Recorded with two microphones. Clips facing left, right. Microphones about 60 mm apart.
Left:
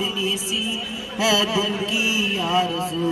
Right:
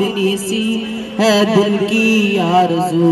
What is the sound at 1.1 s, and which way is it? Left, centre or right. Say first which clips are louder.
Mantra: right 9 dB; right.